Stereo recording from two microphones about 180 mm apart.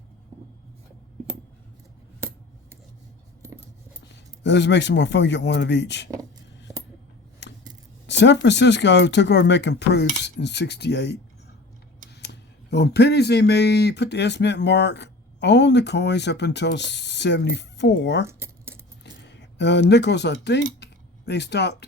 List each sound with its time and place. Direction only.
4.1 s speech: 75° left (ahead or behind)
7.4 s scissors: 75° left (ahead or behind)
8.0 s speech: 75° left (ahead or behind)
12.2 s speech: 70° left (ahead or behind)
18.3 s keys jangling: 15° right (ahead or behind)
19.0 s speech: 75° left (ahead or behind)